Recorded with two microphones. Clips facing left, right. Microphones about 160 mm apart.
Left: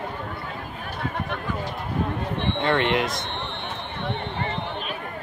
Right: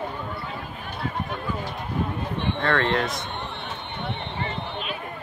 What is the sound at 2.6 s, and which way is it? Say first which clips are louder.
Speech: left 1 dB; 15° left (ahead or behind).